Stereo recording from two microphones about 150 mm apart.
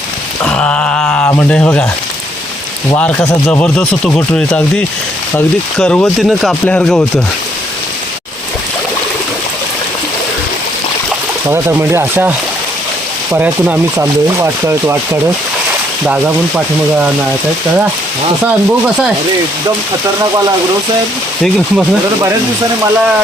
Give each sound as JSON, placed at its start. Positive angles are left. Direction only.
{"t": 0.4, "sound": "a sound", "side_deg": 5}
{"t": 2.9, "sound": "speech", "side_deg": 10}
{"t": 5.7, "sound": "speech", "side_deg": 5}
{"t": 11.4, "sound": "speech", "side_deg": -15}
{"t": 13.3, "sound": "speech", "side_deg": -15}